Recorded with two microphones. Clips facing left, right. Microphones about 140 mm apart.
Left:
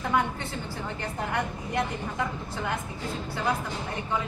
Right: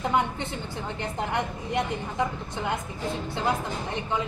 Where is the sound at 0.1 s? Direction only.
20° right (ahead or behind).